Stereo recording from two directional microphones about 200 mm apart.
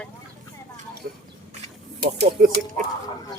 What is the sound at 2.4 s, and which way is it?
Speech, 45° right (ahead or behind).